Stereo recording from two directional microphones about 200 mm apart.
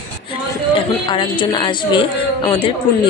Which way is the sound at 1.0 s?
25° left (ahead or behind).